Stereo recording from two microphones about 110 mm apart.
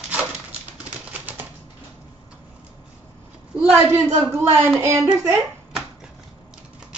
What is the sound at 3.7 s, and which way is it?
Speech, 25° right (ahead or behind).